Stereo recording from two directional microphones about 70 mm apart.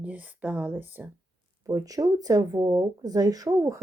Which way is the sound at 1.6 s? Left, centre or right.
Right.